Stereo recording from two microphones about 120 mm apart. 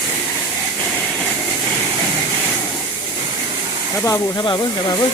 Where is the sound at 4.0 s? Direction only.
25° left (ahead or behind).